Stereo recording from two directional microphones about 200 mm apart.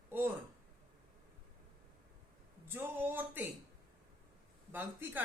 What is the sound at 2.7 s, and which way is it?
Speech, 10° right (ahead or behind).